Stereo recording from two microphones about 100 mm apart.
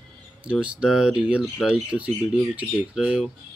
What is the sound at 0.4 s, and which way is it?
Speech, 10° right (ahead or behind).